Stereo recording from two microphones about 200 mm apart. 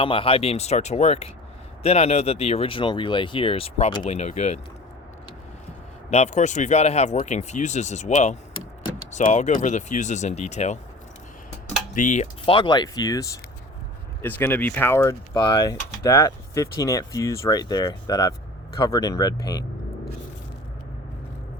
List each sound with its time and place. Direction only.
0.0 s speech: 25° left (ahead or behind)
6.1 s speech: 35° left (ahead or behind)
11.9 s speech: 40° left (ahead or behind); by 19.6 s 20° left (ahead or behind)